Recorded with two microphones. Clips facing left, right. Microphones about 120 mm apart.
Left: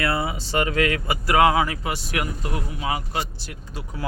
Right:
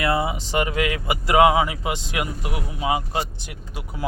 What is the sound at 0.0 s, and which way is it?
Speech, 20° right (ahead or behind).